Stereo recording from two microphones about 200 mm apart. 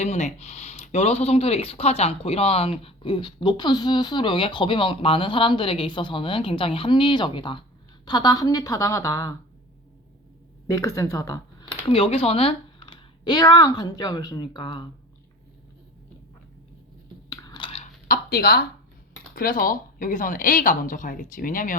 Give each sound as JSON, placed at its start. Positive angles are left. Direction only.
{"t": 0.0, "sound": "a woman's voice", "side_deg": 35}
{"t": 10.7, "sound": "a woman's voice", "side_deg": 15}
{"t": 11.9, "sound": "speech", "side_deg": 30}
{"t": 17.2, "sound": "chewing", "side_deg": 20}
{"t": 18.1, "sound": "a woman's voice", "side_deg": 50}